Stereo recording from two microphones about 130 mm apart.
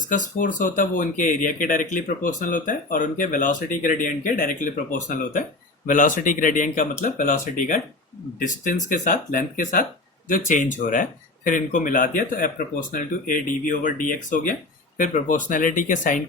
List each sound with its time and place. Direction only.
0.1 s speech: 85° left